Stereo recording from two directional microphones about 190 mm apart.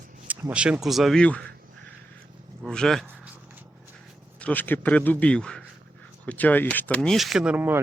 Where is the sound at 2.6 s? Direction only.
5° left (ahead or behind).